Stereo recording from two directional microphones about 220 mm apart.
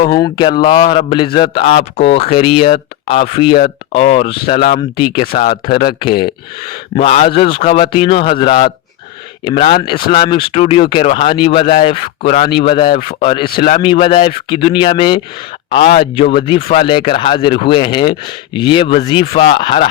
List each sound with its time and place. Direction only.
0.0 s speech: 20° left (ahead or behind)
5.3 s speech: 35° left (ahead or behind)
13.1 s speech: 35° left (ahead or behind)
13.6 s speech: 25° left (ahead or behind)